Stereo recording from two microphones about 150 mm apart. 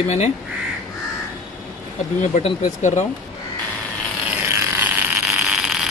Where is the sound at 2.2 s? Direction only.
55° left (ahead or behind).